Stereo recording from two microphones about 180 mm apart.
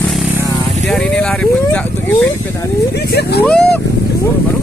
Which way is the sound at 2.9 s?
65° left (ahead or behind).